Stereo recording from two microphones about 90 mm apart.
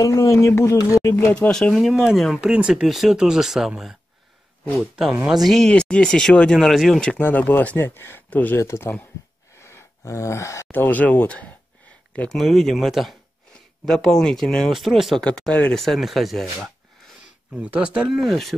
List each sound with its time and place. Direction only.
0.0 s speech: 35° left (ahead or behind)
1.3 s speech: 10° left (ahead or behind)
5.3 s speech: centre (ahead or behind)
7.2 s speech: 20° left (ahead or behind)
8.5 s speech: 30° left (ahead or behind)
9.6 s gasp: 30° left (ahead or behind)
10.7 s speech: 20° left (ahead or behind)
12.3 s speech: centre (ahead or behind)
15.2 s speech: 10° left (ahead or behind)
17.6 s speech: 15° right (ahead or behind)